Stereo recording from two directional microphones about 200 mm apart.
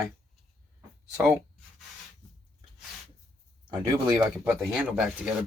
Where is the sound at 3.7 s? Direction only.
20° right (ahead or behind).